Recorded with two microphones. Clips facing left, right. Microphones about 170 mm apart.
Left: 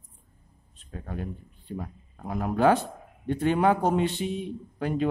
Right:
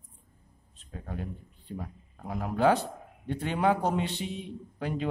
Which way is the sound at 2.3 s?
55° left (ahead or behind).